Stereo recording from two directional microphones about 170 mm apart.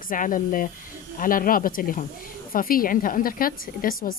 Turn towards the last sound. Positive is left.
turn(degrees=60)  # may be behind; listen again after turning